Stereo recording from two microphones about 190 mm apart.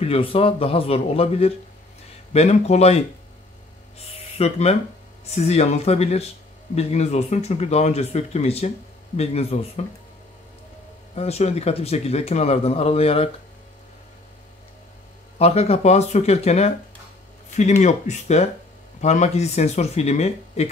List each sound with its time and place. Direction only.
0.0 s speech: 30° left (ahead or behind)
4.4 s speech: 35° left (ahead or behind)
11.1 s speech: 35° left (ahead or behind)
15.3 s speech: 35° left (ahead or behind)